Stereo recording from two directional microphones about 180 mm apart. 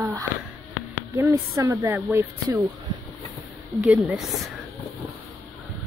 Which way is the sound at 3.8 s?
5° right (ahead or behind).